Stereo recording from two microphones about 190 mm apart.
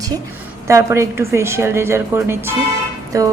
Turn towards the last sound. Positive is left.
turn(degrees=-15)  # may be behind; listen again after turning